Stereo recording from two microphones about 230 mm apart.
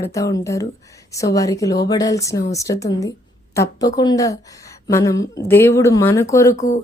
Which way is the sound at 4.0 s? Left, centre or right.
Centre.